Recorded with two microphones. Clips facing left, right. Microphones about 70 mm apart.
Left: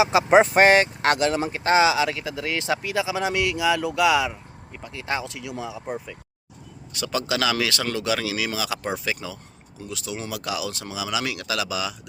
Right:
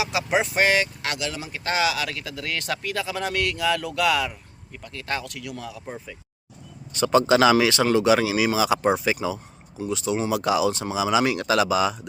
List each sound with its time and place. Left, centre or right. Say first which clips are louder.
0.0 s speech: left 7 dB; left
6.9 s speech: right 8 dB; right